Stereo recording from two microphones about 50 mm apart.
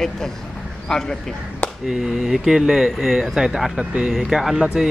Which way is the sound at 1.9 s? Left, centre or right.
Centre.